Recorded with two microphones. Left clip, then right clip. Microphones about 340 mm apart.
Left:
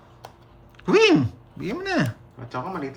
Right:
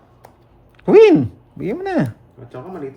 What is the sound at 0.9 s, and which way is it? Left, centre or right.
Speech, centre.